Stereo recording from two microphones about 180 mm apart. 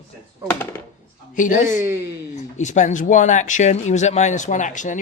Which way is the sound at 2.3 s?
40° left (ahead or behind).